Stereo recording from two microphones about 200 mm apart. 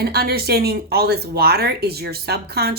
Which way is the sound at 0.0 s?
50° right (ahead or behind).